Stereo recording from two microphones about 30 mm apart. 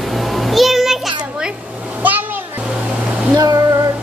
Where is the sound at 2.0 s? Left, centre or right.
Right.